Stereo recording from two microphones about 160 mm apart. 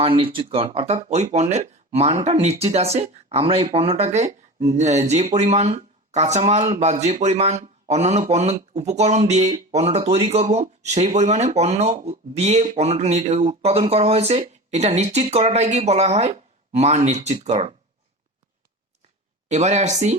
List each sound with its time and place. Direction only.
0.0 s speech: 35° right (ahead or behind)
19.5 s speech: 45° right (ahead or behind)